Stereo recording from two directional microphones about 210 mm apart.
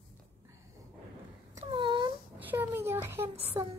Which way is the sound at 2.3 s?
10° right (ahead or behind).